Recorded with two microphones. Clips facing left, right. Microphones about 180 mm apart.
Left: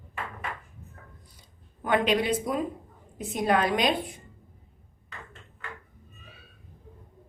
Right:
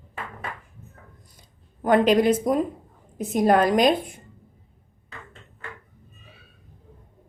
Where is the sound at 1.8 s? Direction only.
40° right (ahead or behind).